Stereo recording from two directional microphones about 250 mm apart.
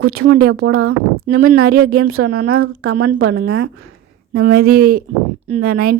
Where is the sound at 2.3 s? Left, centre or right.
Right.